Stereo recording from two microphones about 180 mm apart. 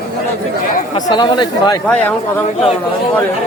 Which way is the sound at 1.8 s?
5° left (ahead or behind).